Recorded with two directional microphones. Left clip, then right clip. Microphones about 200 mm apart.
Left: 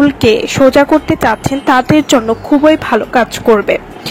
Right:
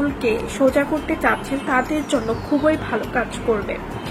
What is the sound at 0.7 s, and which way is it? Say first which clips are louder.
A woman's voice: left 11 dB; 50° left (ahead or behind).